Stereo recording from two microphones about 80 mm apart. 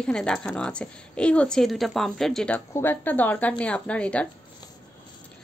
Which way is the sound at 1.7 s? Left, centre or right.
Centre.